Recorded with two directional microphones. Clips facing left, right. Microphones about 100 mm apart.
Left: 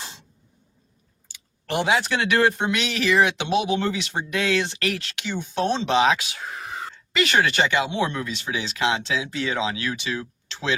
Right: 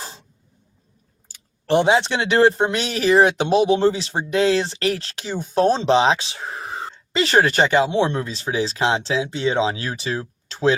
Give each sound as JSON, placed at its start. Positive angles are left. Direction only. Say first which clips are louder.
{"t": 1.6, "sound": "speech", "louder": "right 6 dB", "side_deg": -30}